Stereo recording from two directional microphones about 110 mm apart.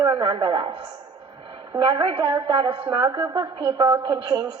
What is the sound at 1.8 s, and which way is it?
A woman's voice, 50° right (ahead or behind).